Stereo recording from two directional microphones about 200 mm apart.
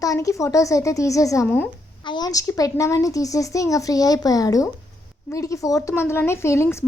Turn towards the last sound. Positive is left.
turn(degrees=15)  # may be behind; listen again after turning